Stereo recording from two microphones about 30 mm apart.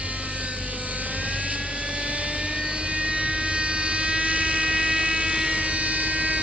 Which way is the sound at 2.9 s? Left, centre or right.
Right.